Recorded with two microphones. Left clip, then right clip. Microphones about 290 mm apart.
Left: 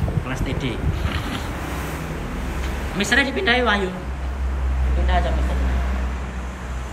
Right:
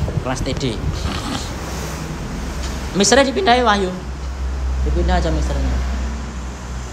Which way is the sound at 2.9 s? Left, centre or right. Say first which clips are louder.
Right 6 dB; centre.